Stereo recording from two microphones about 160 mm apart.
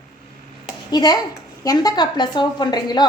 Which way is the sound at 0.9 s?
25° left (ahead or behind).